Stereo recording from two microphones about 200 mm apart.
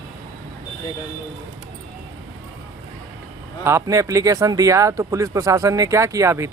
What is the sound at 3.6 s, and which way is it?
Speech, 15° right (ahead or behind).